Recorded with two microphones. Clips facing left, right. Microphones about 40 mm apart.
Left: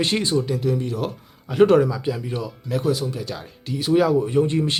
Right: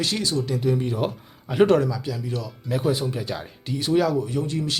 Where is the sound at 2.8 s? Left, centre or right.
Right.